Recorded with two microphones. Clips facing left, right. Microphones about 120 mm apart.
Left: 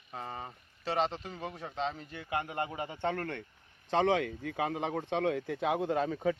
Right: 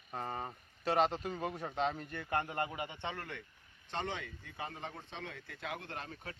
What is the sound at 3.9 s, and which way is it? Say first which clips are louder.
Speech: left 12 dB; 90° left.